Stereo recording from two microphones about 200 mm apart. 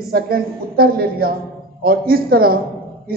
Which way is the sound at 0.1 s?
50° right (ahead or behind).